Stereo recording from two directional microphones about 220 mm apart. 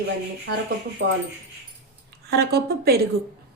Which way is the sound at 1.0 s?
55° right (ahead or behind).